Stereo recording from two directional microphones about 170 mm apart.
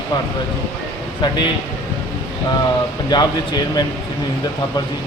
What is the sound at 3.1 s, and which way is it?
Speech, 25° left (ahead or behind).